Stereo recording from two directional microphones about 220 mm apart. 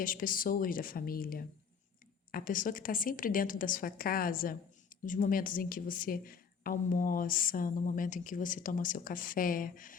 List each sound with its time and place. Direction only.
0.0 s a woman's voice: 40° left (ahead or behind)